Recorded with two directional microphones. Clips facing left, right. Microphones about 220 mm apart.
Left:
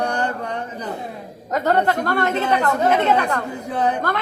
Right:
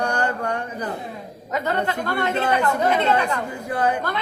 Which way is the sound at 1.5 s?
40° left (ahead or behind).